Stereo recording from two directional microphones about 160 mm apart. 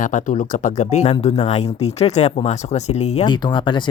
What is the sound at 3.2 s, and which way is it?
Speech, 30° left (ahead or behind).